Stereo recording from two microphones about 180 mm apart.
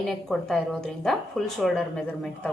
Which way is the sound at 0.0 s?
5° left (ahead or behind).